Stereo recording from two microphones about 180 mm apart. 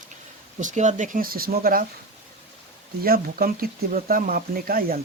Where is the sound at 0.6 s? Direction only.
40° right (ahead or behind).